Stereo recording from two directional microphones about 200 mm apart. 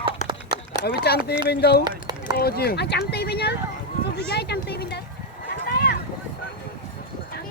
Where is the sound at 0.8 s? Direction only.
50° left (ahead or behind).